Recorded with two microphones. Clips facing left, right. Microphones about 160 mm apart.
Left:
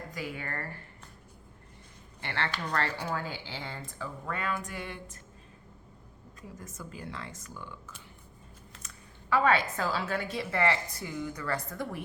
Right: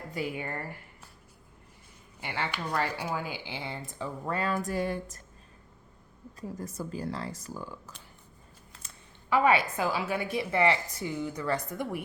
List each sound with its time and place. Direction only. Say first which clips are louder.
0.1 s speech: right 6 dB; 25° right (ahead or behind)
0.4 s speech: right 2 dB; 15° right (ahead or behind)
2.2 s a woman's voice: even; 10° right (ahead or behind)
3.9 s speech: right 5 dB; 30° right (ahead or behind)
6.6 s speech: right 7 dB; 35° right (ahead or behind)
9.3 s a woman's voice: right 2 dB; 15° right (ahead or behind)